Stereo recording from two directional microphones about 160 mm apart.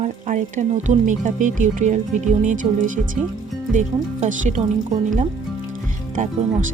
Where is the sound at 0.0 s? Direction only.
50° right (ahead or behind).